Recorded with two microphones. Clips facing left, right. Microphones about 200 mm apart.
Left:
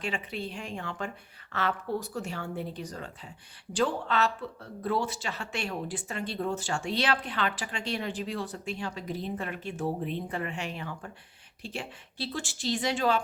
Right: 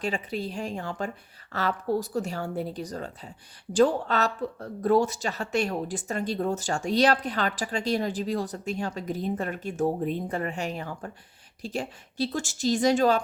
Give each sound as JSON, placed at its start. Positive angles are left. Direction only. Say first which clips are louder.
{"t": 0.0, "sound": "a woman's voice", "louder": "right 4 dB", "side_deg": -40}